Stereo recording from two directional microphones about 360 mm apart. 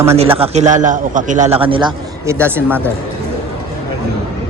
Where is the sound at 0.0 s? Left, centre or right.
Centre.